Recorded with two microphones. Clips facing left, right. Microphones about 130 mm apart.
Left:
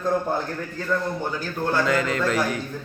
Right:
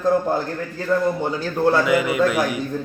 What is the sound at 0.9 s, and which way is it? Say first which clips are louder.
Speech: right 5 dB; 30° right (ahead or behind).